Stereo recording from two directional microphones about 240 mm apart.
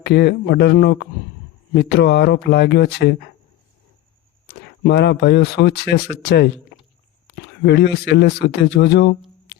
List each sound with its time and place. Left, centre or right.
0.0 s speech: left
4.4 s a man's voice: left